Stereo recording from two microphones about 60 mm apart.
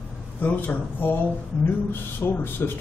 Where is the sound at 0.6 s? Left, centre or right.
Left.